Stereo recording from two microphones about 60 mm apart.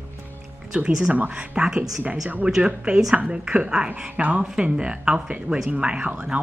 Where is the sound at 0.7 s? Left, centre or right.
Centre.